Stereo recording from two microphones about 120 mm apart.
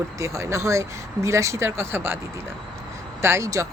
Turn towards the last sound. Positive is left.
turn(degrees=-25)  # may be behind; listen again after turning